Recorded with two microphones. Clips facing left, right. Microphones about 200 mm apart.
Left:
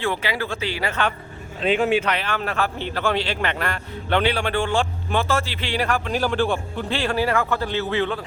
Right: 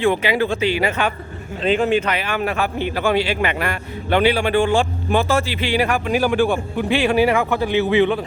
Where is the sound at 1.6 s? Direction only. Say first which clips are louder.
Right 2 dB; 5° left (ahead or behind).